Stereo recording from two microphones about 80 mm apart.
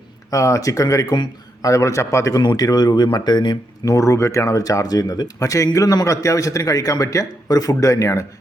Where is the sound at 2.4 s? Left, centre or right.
Left.